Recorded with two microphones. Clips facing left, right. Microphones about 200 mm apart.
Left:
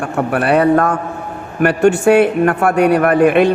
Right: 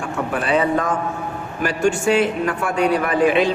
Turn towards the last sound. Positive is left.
turn(degrees=60)  # may be behind; listen again after turning